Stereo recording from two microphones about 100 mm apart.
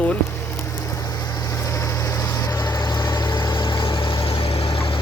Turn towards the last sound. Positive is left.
turn(degrees=70)  # may be behind; listen again after turning